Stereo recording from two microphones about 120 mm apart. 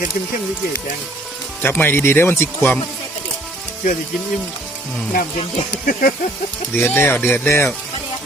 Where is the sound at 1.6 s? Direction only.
15° left (ahead or behind).